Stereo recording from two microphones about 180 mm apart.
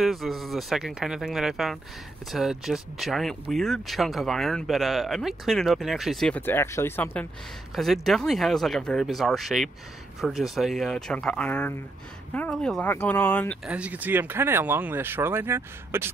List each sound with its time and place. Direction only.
0.0 s speech: centre (ahead or behind)
7.7 s speech: centre (ahead or behind)
13.7 s speech: 5° right (ahead or behind)